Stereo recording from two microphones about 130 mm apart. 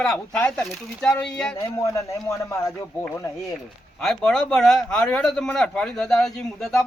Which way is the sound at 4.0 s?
5° left (ahead or behind).